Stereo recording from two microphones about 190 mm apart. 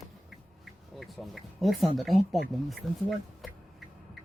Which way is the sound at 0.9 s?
Centre (ahead or behind).